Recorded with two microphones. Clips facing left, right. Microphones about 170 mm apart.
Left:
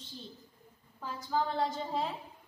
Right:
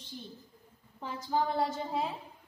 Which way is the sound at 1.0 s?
20° right (ahead or behind).